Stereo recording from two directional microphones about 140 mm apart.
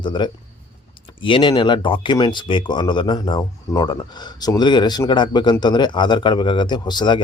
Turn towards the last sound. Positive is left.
turn(degrees=30)  # may be behind; listen again after turning